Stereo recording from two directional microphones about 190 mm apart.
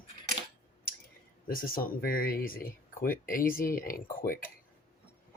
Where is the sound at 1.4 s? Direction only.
50° left (ahead or behind).